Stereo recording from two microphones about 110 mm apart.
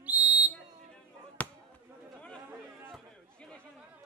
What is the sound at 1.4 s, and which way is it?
Basketball bounce, 15° left (ahead or behind).